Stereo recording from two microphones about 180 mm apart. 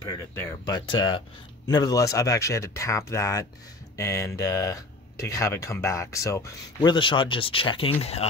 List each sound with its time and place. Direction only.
0.3 s speech: 15° left (ahead or behind); by 8.3 s 35° left (ahead or behind)